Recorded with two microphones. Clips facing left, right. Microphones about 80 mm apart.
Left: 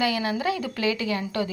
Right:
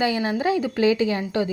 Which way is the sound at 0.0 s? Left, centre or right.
Right.